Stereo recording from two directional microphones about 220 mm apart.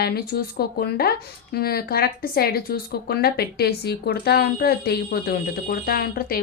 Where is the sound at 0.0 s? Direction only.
45° left (ahead or behind).